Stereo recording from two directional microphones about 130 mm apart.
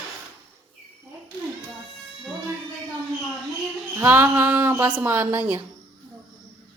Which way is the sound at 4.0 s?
15° right (ahead or behind).